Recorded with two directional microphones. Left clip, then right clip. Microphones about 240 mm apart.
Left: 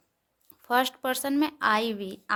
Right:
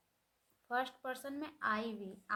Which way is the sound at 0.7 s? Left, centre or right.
Left.